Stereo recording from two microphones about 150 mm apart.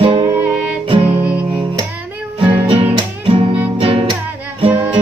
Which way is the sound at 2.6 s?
35° right (ahead or behind).